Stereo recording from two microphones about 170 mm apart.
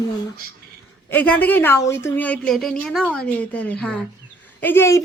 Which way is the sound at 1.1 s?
10° left (ahead or behind).